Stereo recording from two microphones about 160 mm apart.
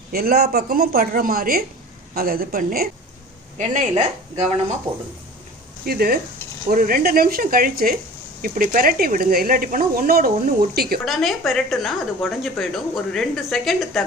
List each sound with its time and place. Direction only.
0.1 s speech: 70° right (ahead or behind)
3.6 s speech: 50° right (ahead or behind)
4.9 s speech: 35° right (ahead or behind)
5.8 s speech: 70° right (ahead or behind)
11.0 s speech: centre (ahead or behind)